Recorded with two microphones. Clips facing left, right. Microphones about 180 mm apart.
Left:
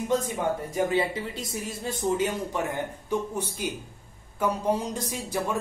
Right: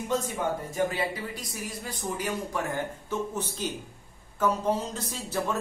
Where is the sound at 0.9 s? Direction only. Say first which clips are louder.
Left 5 dB; 25° left (ahead or behind).